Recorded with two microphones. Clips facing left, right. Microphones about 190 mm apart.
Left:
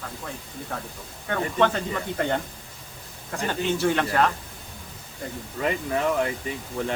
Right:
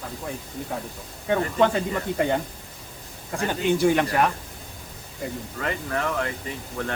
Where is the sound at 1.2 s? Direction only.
15° right (ahead or behind).